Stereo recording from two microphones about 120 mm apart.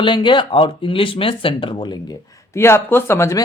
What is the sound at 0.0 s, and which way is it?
Speech, 40° left (ahead or behind).